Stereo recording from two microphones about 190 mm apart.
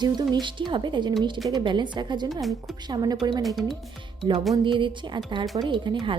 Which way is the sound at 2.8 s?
20° right (ahead or behind).